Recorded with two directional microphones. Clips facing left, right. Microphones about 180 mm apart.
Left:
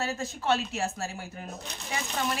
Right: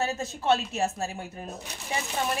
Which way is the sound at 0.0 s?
20° right (ahead or behind).